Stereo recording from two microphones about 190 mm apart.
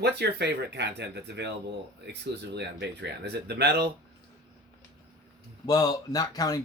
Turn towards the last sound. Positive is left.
turn(degrees=20)  # may be behind; listen again after turning